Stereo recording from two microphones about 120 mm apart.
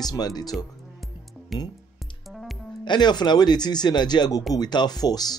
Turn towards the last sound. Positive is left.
turn(degrees=35)  # may be behind; listen again after turning